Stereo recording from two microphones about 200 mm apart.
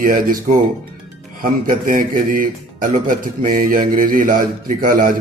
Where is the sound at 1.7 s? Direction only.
40° right (ahead or behind).